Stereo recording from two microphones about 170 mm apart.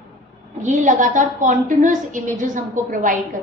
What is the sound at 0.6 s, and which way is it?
A woman's voice, 45° right (ahead or behind).